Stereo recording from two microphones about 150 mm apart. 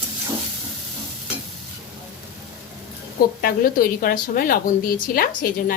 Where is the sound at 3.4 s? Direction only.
80° left.